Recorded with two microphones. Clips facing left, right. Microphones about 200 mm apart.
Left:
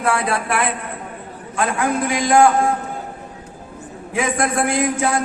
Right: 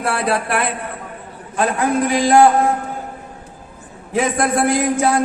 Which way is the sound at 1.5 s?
35° right (ahead or behind).